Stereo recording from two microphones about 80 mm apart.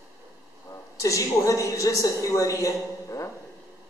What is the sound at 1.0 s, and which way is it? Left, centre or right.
A man's voice, left.